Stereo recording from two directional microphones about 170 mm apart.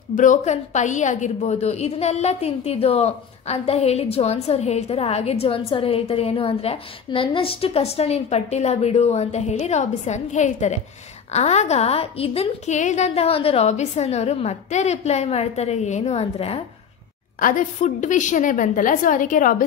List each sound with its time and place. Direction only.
0.1 s a woman's voice: 45° left (ahead or behind)
17.4 s a woman's voice: 50° left (ahead or behind)